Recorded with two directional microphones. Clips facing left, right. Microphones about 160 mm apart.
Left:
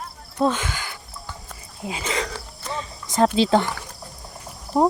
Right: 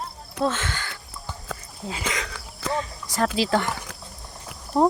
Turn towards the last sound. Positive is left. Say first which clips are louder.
# left 1 dB
turn(degrees=15)  # may be behind; listen again after turning